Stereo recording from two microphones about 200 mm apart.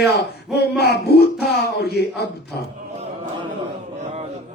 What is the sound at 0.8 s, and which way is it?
A man's voice, 55° left (ahead or behind).